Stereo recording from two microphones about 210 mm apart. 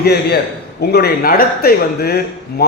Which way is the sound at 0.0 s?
50° left (ahead or behind).